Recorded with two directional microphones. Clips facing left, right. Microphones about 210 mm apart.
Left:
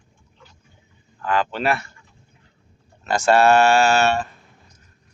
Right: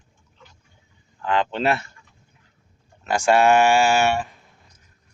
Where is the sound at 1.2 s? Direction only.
20° right (ahead or behind).